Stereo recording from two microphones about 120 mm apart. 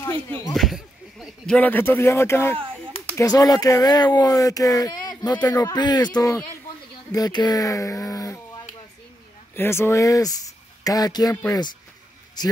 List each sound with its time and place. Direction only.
0.0 s speech: 25° left (ahead or behind)
0.6 s a sound: 5° right (ahead or behind)
1.4 s speech: 10° left (ahead or behind); by 8.4 s 30° left (ahead or behind)
9.6 s speech: 20° left (ahead or behind)
12.4 s speech: 35° left (ahead or behind)